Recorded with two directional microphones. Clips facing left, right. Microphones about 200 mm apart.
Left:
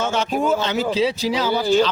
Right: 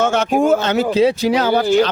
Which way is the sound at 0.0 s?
50° right (ahead or behind).